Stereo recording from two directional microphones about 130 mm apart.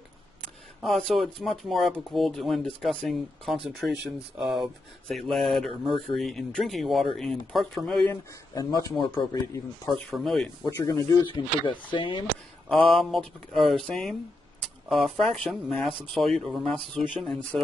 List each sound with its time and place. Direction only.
0.8 s speech: centre (ahead or behind)
8.1 s speech: 30° left (ahead or behind)
9.9 s speech: centre (ahead or behind)
10.7 s speech: 25° left (ahead or behind); by 12.3 s 40° left (ahead or behind)
12.6 s speech: centre (ahead or behind)